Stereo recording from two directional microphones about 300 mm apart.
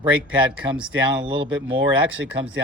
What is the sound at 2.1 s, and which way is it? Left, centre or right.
Speech, right.